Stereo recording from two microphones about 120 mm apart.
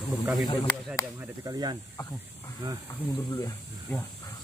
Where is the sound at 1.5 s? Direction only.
35° right (ahead or behind).